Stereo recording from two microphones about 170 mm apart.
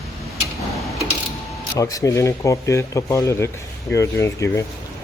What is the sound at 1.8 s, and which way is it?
Speech, 20° left (ahead or behind).